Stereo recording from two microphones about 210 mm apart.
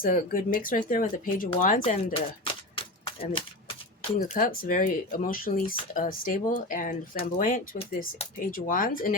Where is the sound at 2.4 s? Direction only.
25° left (ahead or behind).